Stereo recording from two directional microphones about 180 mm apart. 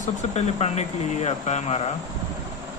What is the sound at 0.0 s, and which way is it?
Speech, 40° left (ahead or behind).